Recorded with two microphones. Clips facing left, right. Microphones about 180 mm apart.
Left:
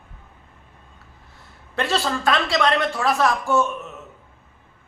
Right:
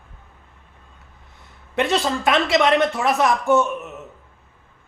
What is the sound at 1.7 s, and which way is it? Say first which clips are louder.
A man's voice: right 3 dB; 20° right (ahead or behind).